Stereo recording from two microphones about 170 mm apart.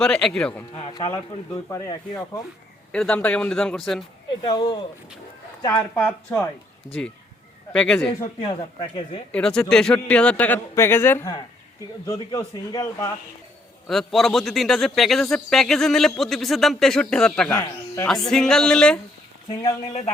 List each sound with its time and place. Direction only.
0.0 s a man's voice: 5° left (ahead or behind)
0.8 s a man's voice: 30° left (ahead or behind)
2.9 s a man's voice: 5° left (ahead or behind)
4.4 s speech: 25° left (ahead or behind)
5.6 s a man's voice: 10° left (ahead or behind)
7.7 s a man's voice: 5° left (ahead or behind)
9.3 s a man's voice: 5° left (ahead or behind); by 13.1 s 20° left (ahead or behind)
13.8 s a man's voice: centre (ahead or behind)
17.6 s a man's voice: 15° left (ahead or behind)
18.3 s a man's voice: 5° left (ahead or behind)
19.5 s speech: 20° left (ahead or behind)